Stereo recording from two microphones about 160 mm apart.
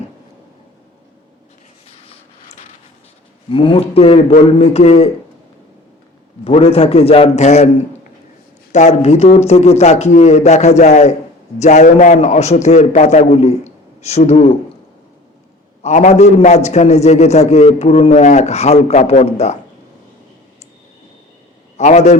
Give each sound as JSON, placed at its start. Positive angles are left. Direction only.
{"t": 3.5, "sound": "a man's voice", "side_deg": 35}
{"t": 6.4, "sound": "a man's voice", "side_deg": 35}
{"t": 8.7, "sound": "a man's voice", "side_deg": 50}
{"t": 15.8, "sound": "a man's voice", "side_deg": 45}
{"t": 21.8, "sound": "a man's voice", "side_deg": 45}